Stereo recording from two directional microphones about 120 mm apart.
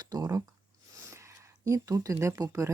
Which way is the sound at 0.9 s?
25° right (ahead or behind).